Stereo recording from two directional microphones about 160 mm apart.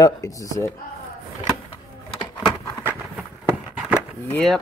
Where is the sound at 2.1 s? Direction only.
30° left (ahead or behind).